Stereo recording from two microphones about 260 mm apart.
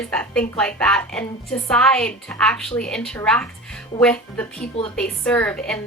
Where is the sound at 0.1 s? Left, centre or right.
Centre.